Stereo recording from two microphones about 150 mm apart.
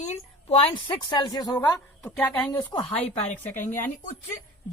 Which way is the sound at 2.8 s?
10° left (ahead or behind).